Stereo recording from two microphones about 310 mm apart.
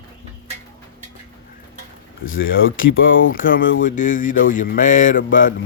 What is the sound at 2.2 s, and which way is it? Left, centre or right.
Speech, left.